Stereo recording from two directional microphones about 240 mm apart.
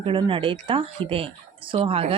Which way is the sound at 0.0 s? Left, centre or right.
Right.